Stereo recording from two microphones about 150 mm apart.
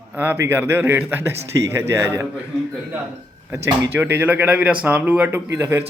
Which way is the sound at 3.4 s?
15° right (ahead or behind).